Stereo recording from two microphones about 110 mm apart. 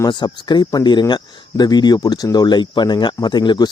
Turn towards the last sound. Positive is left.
turn(degrees=45)  # may be behind; listen again after turning